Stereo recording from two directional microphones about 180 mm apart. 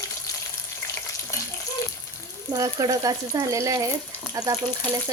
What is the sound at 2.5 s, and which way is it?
Speech, 20° right (ahead or behind).